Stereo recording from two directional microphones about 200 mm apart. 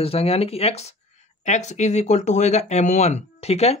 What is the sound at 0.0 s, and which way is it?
Speech, 30° left (ahead or behind).